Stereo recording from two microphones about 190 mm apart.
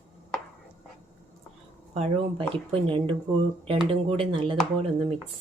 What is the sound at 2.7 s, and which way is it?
Speech, 25° right (ahead or behind).